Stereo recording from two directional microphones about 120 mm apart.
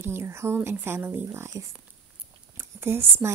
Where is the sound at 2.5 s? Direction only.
20° right (ahead or behind).